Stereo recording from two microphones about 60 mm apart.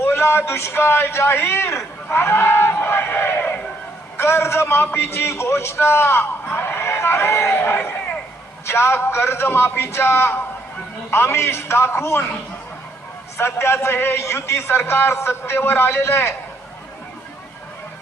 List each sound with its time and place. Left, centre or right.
0.0 s a man's voice: left
7.6 s a man's voice: left
13.3 s a man's voice: left